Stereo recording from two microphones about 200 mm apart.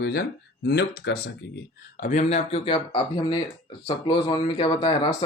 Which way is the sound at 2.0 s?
40° left (ahead or behind).